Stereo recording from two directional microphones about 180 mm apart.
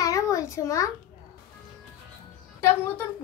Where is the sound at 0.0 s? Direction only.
20° left (ahead or behind).